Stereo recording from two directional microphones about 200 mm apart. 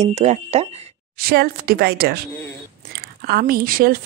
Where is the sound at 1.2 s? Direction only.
50° right (ahead or behind).